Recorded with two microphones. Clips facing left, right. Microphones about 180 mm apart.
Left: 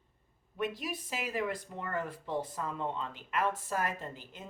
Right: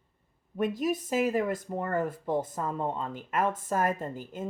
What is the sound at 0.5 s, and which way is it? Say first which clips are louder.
Speech: right 8 dB; 45° right (ahead or behind).